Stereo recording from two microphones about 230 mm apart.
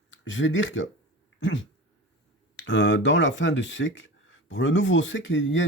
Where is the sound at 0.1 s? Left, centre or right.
Left.